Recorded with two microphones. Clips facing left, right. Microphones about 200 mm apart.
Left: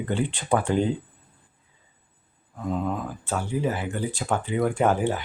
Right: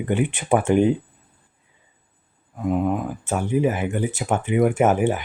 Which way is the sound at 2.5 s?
15° right (ahead or behind).